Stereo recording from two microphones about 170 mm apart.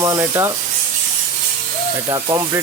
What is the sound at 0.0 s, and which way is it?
Speech, 20° right (ahead or behind).